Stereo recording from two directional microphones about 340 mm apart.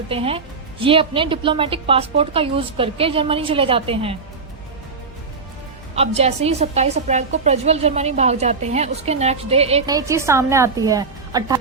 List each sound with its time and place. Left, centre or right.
0.1 s a woman's voice: centre
5.9 s a woman's voice: centre